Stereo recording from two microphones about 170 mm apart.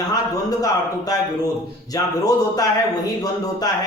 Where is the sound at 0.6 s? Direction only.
20° left (ahead or behind).